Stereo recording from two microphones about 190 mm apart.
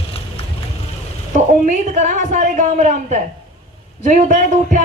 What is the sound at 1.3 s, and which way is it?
A woman's voice, 40° right (ahead or behind).